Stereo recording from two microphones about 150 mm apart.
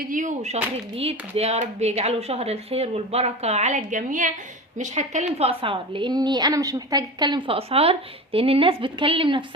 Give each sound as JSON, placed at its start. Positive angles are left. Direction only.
{"t": 0.0, "sound": "a woman's voice", "side_deg": -60}